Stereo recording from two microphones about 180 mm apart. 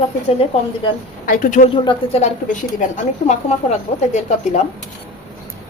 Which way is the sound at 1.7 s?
25° left (ahead or behind).